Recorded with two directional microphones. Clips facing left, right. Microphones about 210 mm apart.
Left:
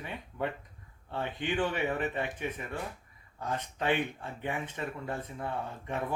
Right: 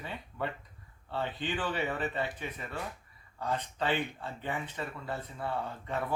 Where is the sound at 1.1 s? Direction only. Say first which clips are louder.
Left 1 dB; 15° left (ahead or behind).